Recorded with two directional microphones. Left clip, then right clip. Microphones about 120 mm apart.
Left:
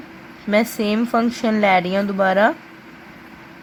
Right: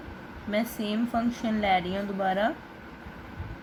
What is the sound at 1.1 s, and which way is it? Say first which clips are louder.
Speech: left 11 dB; 90° left.